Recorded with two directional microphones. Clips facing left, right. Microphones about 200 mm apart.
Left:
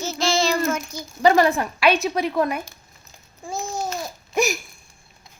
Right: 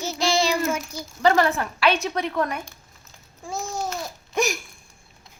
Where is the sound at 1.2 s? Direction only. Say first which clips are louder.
Left 3 dB; 15° left (ahead or behind).